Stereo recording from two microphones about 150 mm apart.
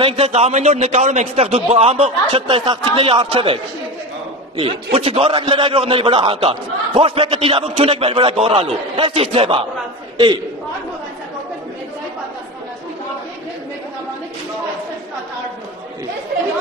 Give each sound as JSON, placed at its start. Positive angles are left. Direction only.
{"t": 0.0, "sound": "a man's voice", "side_deg": -40}
{"t": 4.9, "sound": "a man's voice", "side_deg": -40}